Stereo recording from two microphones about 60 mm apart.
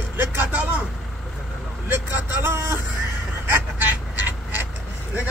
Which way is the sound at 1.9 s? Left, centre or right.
Right.